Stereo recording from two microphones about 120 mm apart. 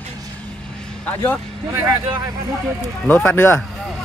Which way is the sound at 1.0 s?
15° left (ahead or behind).